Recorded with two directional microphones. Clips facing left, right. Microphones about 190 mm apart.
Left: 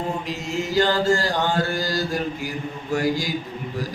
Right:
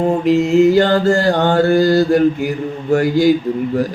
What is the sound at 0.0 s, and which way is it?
A man's voice, 60° right (ahead or behind).